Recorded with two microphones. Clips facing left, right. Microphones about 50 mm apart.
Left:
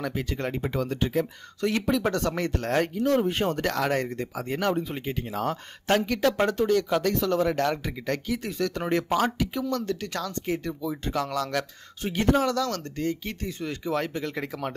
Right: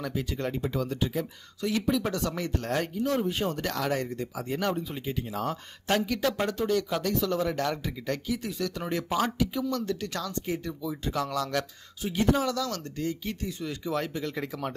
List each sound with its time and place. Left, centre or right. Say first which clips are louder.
0.0 s speech: left 2 dB; left